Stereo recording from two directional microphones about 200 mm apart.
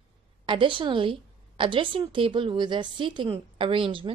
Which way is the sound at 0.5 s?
25° right (ahead or behind).